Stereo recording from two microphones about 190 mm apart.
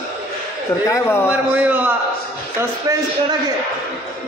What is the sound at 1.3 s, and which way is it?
Speech, 10° right (ahead or behind).